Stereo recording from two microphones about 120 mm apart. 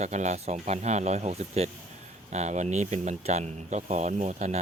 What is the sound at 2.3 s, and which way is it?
Speech, 75° right (ahead or behind).